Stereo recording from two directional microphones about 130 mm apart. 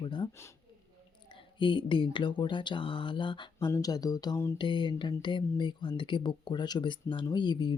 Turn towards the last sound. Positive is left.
turn(degrees=35)  # may be behind; listen again after turning